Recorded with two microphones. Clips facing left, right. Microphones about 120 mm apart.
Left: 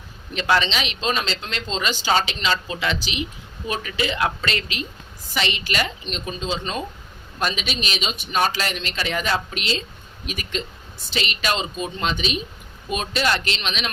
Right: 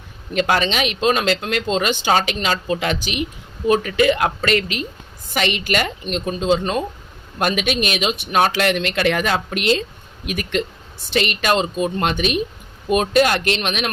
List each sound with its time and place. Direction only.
0.3 s speech: 50° right (ahead or behind)